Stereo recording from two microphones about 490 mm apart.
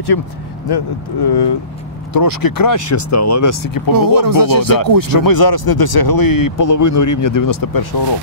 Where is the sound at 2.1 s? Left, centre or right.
Left.